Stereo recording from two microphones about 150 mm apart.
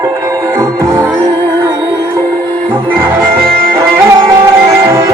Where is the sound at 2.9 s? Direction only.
15° right (ahead or behind).